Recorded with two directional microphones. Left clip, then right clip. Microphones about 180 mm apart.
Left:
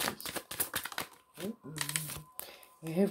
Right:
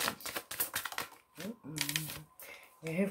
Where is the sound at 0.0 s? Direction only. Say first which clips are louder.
Even; 25° left (ahead or behind).